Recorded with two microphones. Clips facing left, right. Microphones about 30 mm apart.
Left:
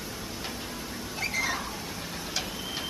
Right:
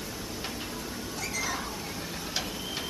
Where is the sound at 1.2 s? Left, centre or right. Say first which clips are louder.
Left 4 dB; left.